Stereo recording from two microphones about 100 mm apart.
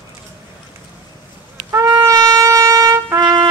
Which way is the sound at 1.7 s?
30° right (ahead or behind).